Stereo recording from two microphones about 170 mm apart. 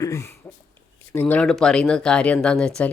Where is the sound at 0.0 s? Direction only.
20° left (ahead or behind).